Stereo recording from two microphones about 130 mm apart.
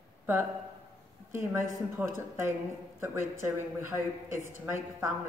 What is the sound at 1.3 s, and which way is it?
Speech, 20° right (ahead or behind).